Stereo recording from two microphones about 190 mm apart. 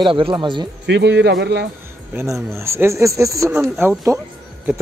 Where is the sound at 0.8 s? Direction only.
65° right (ahead or behind).